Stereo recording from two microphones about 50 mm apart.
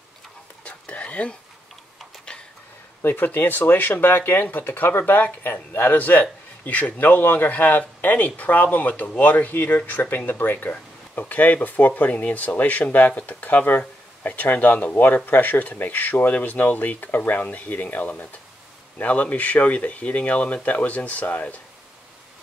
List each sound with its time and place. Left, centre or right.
0.7 s whispering: left
3.0 s speech: left